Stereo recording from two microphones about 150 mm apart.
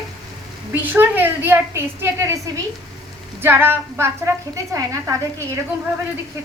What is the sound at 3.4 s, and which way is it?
A woman's voice, 15° right (ahead or behind).